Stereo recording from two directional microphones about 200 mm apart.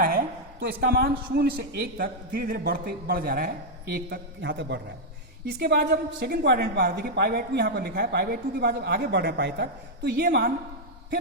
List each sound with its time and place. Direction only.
0.6 s a woman's voice: 55° right (ahead or behind)
5.5 s a woman's voice: 50° right (ahead or behind)